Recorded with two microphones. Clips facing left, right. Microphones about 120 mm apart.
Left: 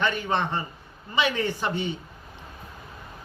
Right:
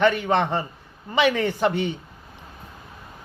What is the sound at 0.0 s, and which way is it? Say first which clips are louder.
Speech: right 6 dB; 60° right (ahead or behind).